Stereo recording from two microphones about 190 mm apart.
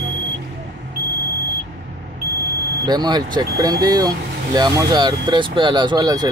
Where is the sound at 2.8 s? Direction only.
20° right (ahead or behind).